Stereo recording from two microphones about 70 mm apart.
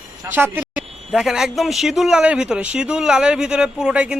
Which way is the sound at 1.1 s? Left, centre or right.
Centre.